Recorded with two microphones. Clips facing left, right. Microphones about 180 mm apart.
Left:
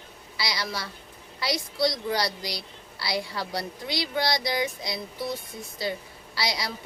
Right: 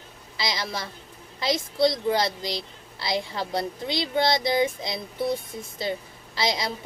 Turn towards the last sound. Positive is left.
turn(degrees=-25)  # may be behind; listen again after turning